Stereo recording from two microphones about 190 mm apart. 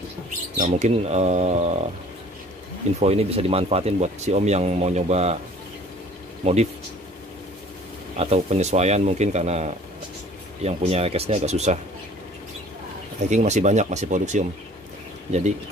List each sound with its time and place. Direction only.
0.6 s speech: 35° right (ahead or behind)
3.0 s speech: 30° right (ahead or behind)
6.4 s speech: 35° right (ahead or behind)
8.2 s speech: 35° right (ahead or behind)
13.3 s speech: 40° right (ahead or behind)